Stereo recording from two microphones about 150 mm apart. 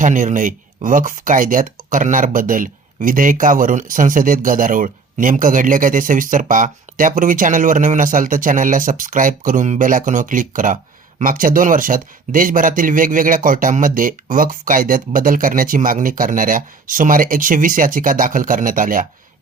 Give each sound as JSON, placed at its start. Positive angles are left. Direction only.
{"t": 0.0, "sound": "speech", "side_deg": -60}